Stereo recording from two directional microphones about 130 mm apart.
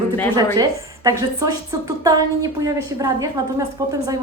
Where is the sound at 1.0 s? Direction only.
30° right (ahead or behind).